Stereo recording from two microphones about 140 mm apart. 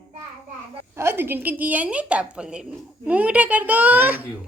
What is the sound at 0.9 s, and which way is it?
A woman's voice, 15° right (ahead or behind).